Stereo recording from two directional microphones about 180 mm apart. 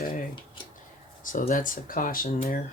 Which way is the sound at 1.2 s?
50° left (ahead or behind).